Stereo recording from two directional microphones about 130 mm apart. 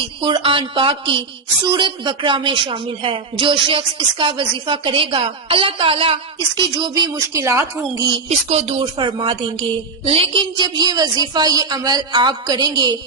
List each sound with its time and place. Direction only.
0.2 s speech: 40° right (ahead or behind)
6.6 s a woman's voice: 35° right (ahead or behind)
8.4 s speech: 55° right (ahead or behind); by 13.0 s 30° right (ahead or behind)